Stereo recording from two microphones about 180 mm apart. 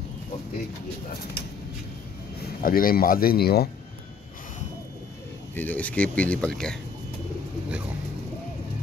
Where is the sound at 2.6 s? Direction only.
55° left (ahead or behind).